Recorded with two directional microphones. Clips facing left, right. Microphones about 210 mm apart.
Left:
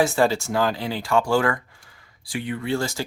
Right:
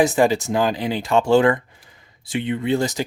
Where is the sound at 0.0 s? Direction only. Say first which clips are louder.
Right 3 dB; 15° right (ahead or behind).